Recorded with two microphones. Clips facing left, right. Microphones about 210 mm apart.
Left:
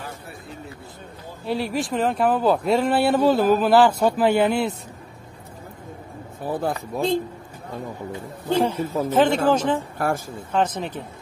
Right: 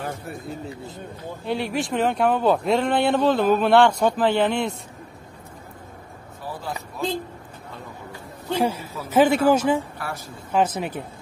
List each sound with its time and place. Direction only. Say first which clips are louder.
1.4 s speech: left 1 dB; centre (ahead or behind)
6.4 s speech: left 7 dB; 55° left (ahead or behind)
8.5 s speech: left 3 dB; 10° right (ahead or behind)
9.9 s a woman's voice: left 9 dB; 50° left (ahead or behind)
10.5 s speech: right 1 dB; 10° right (ahead or behind)